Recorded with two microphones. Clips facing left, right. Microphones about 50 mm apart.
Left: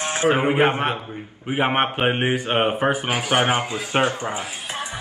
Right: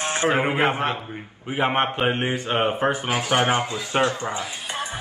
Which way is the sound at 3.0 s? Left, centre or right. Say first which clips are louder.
Left 1 dB; left.